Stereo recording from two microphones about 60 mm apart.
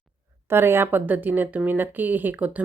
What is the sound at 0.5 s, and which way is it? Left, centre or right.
Speech, right.